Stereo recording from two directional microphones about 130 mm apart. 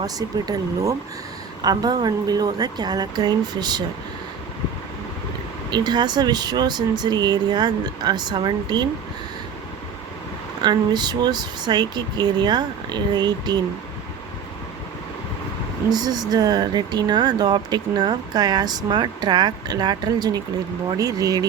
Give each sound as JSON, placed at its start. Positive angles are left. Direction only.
{"t": 0.0, "sound": "speech", "side_deg": -30}
{"t": 5.7, "sound": "speech", "side_deg": -35}
{"t": 10.6, "sound": "speech", "side_deg": -35}
{"t": 15.9, "sound": "speech", "side_deg": -30}